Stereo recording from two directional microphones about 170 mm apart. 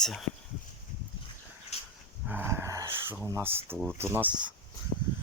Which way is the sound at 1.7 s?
40° left (ahead or behind).